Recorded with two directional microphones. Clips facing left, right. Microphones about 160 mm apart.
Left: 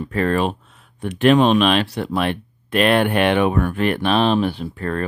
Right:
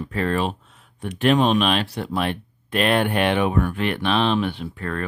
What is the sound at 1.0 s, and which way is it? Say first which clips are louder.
Speech: left 4 dB; 80° left.